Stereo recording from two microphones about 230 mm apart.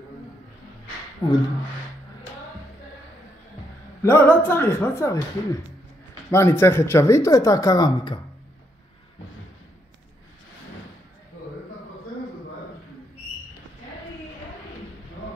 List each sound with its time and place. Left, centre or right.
1.2 s speech: centre
4.0 s speech: centre